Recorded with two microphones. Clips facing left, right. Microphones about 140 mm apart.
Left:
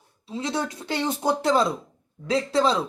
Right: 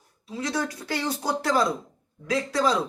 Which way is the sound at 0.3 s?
25° left (ahead or behind).